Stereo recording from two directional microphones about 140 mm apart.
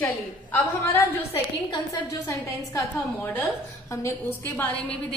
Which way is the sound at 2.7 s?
20° left (ahead or behind).